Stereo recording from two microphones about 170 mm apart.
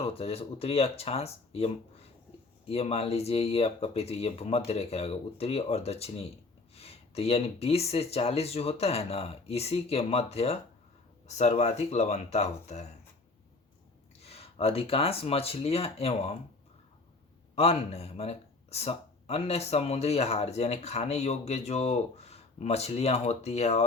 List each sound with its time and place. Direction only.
0.0 s speech: 35° left (ahead or behind)
14.3 s speech: 35° left (ahead or behind)
17.5 s speech: 35° left (ahead or behind)